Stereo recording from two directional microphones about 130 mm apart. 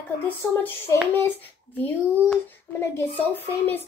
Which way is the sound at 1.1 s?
15° left (ahead or behind).